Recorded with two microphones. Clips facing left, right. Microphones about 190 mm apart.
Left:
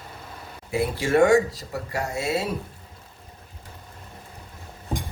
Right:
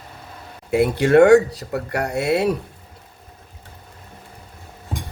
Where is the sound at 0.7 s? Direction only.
65° right (ahead or behind).